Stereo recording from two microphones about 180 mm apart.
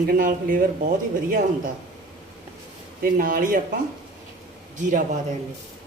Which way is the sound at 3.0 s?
50° right (ahead or behind).